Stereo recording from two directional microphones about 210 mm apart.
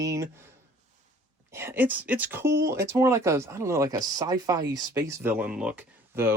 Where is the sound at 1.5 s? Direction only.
10° right (ahead or behind).